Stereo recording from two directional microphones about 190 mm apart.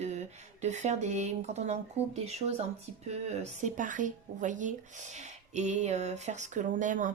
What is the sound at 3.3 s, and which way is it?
Speech, 40° right (ahead or behind).